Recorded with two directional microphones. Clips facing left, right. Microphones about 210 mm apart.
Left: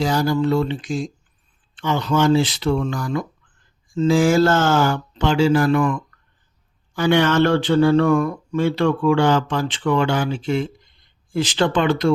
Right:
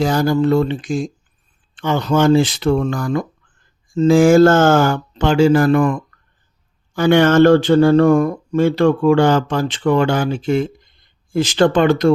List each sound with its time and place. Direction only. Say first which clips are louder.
0.0 s speech: right 4 dB; 50° right (ahead or behind)